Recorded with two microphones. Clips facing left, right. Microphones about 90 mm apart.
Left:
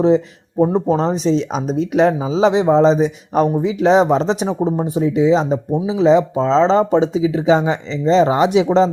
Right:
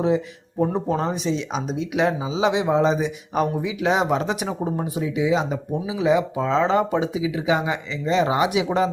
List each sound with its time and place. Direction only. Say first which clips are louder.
0.6 s speech: left 7 dB; 30° left (ahead or behind)